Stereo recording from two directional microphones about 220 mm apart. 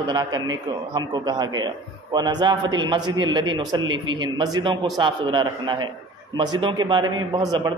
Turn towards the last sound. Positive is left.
turn(degrees=-20)  # may be behind; listen again after turning